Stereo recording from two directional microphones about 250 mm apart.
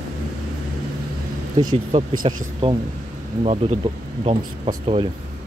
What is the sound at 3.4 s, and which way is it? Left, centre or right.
Speech, right.